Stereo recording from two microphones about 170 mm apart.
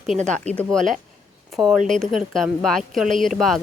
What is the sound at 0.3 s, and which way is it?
Speech, 5° left (ahead or behind).